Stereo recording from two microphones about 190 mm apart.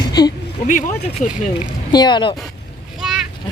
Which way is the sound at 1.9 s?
25° left (ahead or behind).